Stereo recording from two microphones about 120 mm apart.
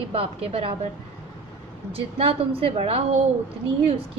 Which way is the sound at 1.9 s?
55° right (ahead or behind).